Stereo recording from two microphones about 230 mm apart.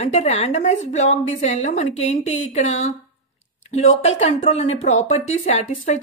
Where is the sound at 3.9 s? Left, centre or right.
Left.